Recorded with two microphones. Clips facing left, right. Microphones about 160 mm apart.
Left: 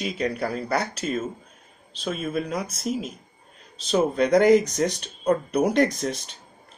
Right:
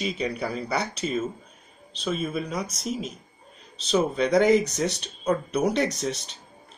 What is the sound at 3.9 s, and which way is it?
Speech, 10° left (ahead or behind).